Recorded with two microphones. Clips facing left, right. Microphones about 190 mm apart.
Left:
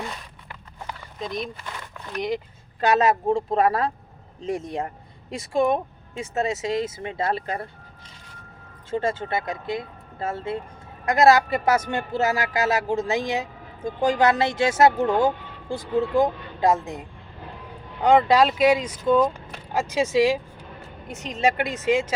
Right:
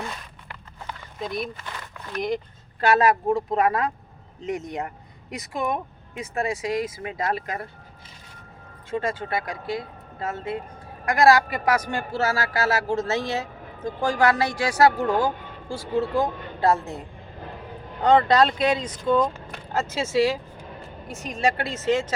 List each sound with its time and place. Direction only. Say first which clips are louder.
1.2 s speech: right 1 dB; 5° right (ahead or behind)
2.8 s speech: even; 20° left (ahead or behind)
8.9 s speech: left 2 dB; 30° left (ahead or behind); by 22.1 s 10° left (ahead or behind)